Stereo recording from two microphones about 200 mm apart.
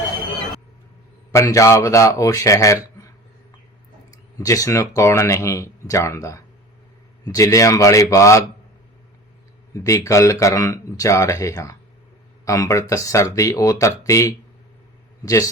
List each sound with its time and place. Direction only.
1.3 s speech: 15° left (ahead or behind)
4.1 s speech: 15° left (ahead or behind)
9.7 s a man's voice: 15° left (ahead or behind)